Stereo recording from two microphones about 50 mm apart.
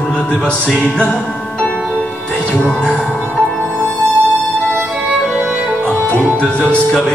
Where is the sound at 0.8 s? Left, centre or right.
Left.